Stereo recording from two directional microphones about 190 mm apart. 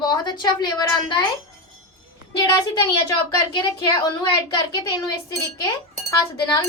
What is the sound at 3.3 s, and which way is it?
A woman's voice, 20° left (ahead or behind).